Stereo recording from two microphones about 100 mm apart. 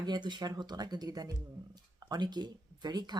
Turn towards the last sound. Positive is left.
turn(degrees=-45)  # may be behind; listen again after turning